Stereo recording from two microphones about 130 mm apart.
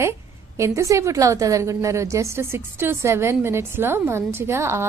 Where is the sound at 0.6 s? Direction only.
20° right (ahead or behind).